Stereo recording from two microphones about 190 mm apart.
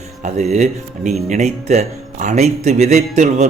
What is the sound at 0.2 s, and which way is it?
Speech, 35° right (ahead or behind).